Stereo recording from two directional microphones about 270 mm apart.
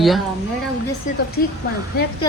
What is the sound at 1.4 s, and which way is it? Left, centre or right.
Speech, left.